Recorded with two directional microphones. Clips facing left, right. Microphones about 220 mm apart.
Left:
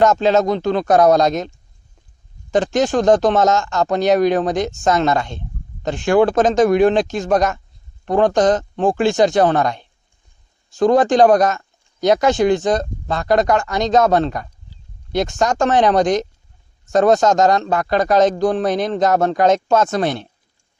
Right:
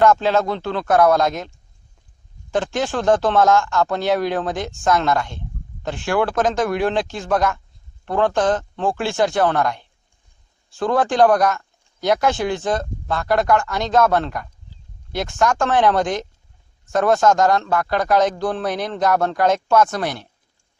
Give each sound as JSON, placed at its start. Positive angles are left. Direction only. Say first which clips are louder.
{"t": 0.0, "sound": "speech", "louder": "left 2 dB", "side_deg": 20}
{"t": 2.5, "sound": "speech", "louder": "left 5 dB", "side_deg": 20}